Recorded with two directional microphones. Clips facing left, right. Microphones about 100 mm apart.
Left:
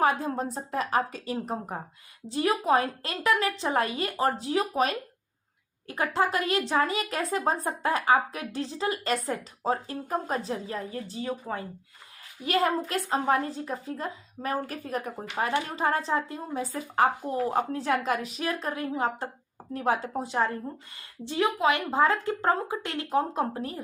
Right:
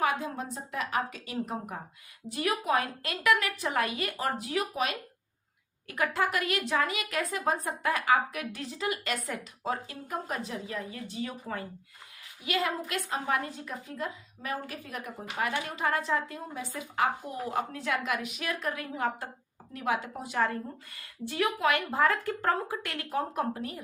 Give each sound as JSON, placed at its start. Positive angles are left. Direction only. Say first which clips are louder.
{"t": 0.0, "sound": "a woman's voice", "louder": "left 4 dB", "side_deg": 40}
{"t": 12.5, "sound": "a woman's voice", "louder": "left 5 dB", "side_deg": 40}